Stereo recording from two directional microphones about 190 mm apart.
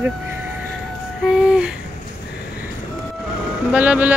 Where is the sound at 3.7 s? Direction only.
5° right (ahead or behind).